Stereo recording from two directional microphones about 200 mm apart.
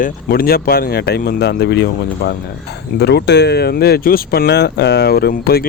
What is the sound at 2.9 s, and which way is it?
Speech, 55° left (ahead or behind).